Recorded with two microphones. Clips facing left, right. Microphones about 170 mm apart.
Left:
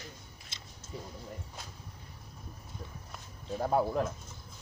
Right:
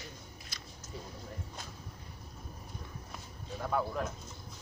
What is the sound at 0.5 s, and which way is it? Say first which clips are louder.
Biting: even; 25° left (ahead or behind).